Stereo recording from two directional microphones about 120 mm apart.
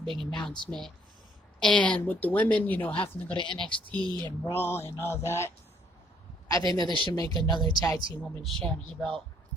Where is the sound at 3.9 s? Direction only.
40° right (ahead or behind).